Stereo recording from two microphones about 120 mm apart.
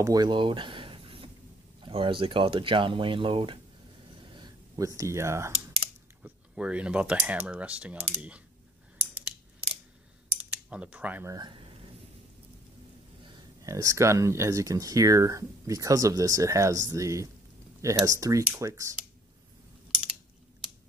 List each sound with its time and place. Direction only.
0.0 s a sound: 30° right (ahead or behind)
1.8 s speech: 45° right (ahead or behind)
4.2 s a sound: 40° right (ahead or behind)
4.7 s speech: 30° right (ahead or behind)
5.5 s speech: 10° right (ahead or behind)
10.3 s cutlery: 10° right (ahead or behind)
11.2 s speech: 35° right (ahead or behind)
13.2 s speech: 40° right (ahead or behind)